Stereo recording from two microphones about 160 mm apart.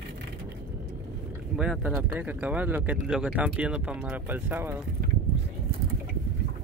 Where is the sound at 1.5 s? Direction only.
5° right (ahead or behind).